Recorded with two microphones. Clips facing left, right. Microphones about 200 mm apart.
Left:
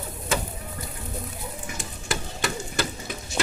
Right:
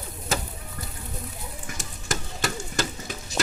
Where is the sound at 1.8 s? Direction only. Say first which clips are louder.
Even; 45° right (ahead or behind).